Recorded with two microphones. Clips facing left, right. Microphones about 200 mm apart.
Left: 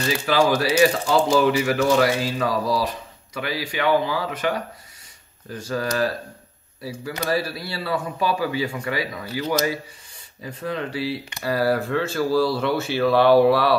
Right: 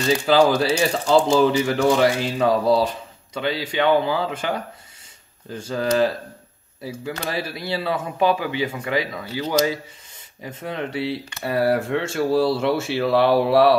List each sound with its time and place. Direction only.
0.3 s speech: 25° right (ahead or behind)